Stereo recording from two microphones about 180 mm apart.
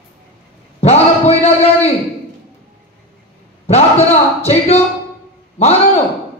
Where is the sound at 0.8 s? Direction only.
35° left (ahead or behind).